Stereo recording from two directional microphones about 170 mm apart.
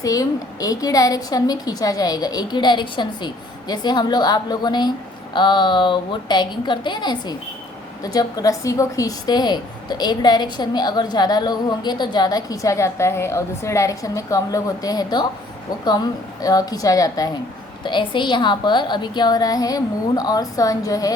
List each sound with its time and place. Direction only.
0.0 s a woman's voice: 20° left (ahead or behind)